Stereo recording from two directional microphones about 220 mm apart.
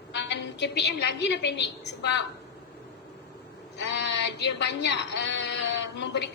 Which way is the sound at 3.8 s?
50° left (ahead or behind).